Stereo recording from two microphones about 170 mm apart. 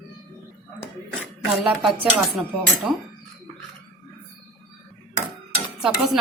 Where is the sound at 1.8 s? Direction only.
Centre (ahead or behind).